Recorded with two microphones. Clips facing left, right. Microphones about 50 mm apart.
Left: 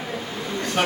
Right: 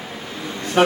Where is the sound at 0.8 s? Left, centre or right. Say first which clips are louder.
Right 7 dB; right.